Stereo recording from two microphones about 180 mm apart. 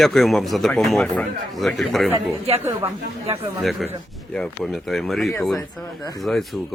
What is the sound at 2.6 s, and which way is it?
Speech, 10° right (ahead or behind).